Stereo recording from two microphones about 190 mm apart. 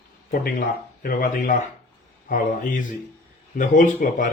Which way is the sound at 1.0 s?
50° left (ahead or behind).